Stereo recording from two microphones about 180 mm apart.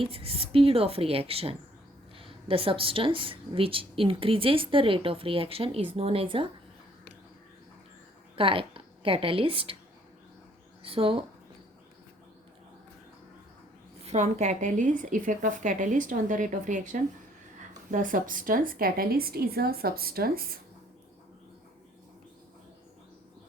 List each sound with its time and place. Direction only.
0.0 s a woman's voice: 30° right (ahead or behind)
8.4 s a woman's voice: 30° right (ahead or behind)
10.8 s speech: 30° right (ahead or behind)
14.0 s a woman's voice: 40° right (ahead or behind); by 20.6 s 55° right (ahead or behind)